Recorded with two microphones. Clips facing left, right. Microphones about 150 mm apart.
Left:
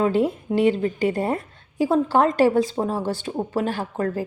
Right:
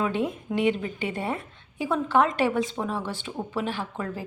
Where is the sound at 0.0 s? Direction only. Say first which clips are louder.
Left 6 dB; 35° left (ahead or behind).